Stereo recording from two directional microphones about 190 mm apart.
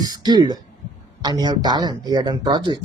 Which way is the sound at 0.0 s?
20° right (ahead or behind).